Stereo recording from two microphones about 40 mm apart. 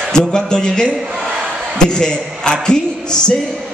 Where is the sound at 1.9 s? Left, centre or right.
Centre.